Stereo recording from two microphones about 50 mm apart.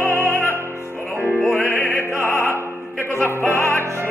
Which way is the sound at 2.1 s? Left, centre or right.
Left.